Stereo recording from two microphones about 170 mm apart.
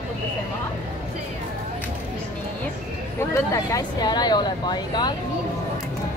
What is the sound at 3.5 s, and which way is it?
Speech, 20° left (ahead or behind).